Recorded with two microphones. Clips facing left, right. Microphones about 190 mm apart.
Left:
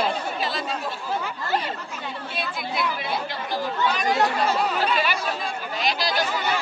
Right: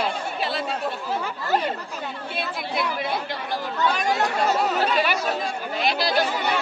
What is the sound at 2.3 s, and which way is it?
Speech, 55° right (ahead or behind).